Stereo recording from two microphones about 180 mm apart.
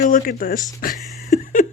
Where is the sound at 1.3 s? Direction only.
45° left (ahead or behind).